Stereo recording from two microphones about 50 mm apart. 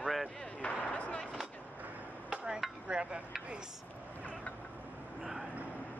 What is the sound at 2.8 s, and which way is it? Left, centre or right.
Speech, centre.